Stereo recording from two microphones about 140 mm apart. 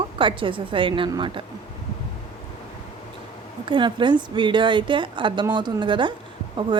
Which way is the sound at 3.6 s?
35° right (ahead or behind).